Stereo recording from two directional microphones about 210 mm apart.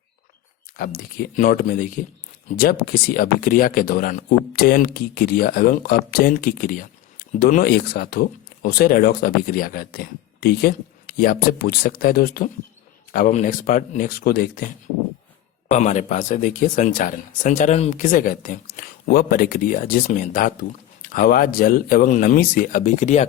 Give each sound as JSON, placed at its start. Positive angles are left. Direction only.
{"t": 0.8, "sound": "speech", "side_deg": 45}
{"t": 15.7, "sound": "speech", "side_deg": 35}